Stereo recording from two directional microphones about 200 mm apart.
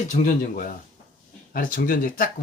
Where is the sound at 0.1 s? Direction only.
40° left (ahead or behind).